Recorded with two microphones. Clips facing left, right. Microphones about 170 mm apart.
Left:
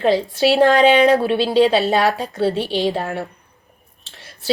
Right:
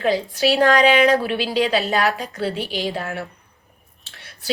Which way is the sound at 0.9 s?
25° left (ahead or behind).